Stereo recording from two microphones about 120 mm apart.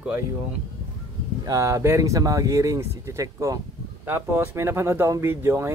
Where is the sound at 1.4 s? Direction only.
25° right (ahead or behind).